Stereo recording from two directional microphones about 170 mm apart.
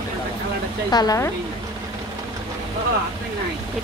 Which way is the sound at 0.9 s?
20° left (ahead or behind).